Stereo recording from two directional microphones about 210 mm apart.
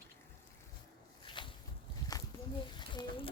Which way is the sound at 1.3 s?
25° left (ahead or behind).